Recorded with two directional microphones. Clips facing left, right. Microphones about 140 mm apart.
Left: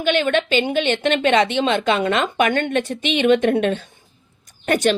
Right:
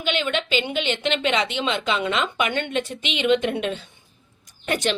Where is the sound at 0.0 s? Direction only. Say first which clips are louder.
Left 6 dB; 45° left (ahead or behind).